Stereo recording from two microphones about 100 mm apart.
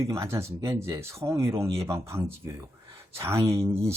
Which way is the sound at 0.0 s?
30° right (ahead or behind).